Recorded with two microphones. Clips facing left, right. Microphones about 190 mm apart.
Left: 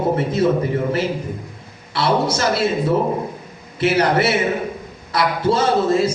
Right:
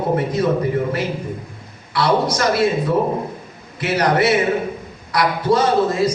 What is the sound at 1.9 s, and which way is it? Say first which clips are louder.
Speech: right 1 dB; 25° left (ahead or behind).